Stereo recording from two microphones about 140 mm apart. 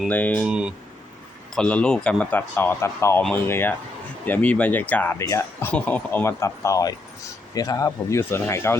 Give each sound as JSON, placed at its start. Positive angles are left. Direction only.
{"t": 0.1, "sound": "speech", "side_deg": 10}
{"t": 0.4, "sound": "speech", "side_deg": -5}
{"t": 1.5, "sound": "speech", "side_deg": 10}